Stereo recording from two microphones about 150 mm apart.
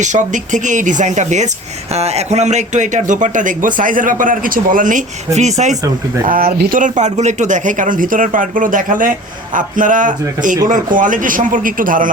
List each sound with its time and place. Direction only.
0.0 s speech: 55° right (ahead or behind)
6.2 s speech: 75° right (ahead or behind)